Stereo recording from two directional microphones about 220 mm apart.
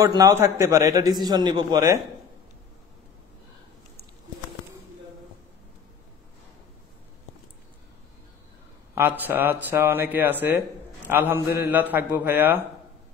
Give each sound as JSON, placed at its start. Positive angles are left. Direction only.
{"t": 0.0, "sound": "a man's voice", "side_deg": -15}
{"t": 8.9, "sound": "a man's voice", "side_deg": -10}